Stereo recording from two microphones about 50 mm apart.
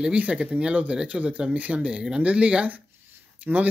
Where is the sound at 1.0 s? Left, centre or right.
Right.